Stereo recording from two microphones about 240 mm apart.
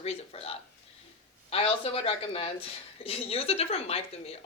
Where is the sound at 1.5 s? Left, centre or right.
Left.